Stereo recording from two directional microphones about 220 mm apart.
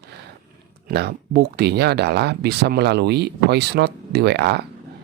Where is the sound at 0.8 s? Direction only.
45° right (ahead or behind).